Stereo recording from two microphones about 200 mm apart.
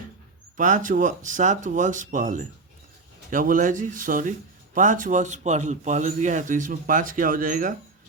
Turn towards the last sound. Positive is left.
turn(degrees=-40)  # may be behind; listen again after turning